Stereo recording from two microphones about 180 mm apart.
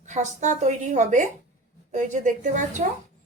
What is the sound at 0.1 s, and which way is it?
A woman's voice, 40° right (ahead or behind).